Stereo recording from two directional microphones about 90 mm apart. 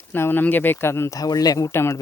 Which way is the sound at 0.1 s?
25° left (ahead or behind).